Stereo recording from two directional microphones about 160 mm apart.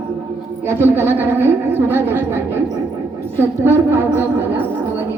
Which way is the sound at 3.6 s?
15° right (ahead or behind).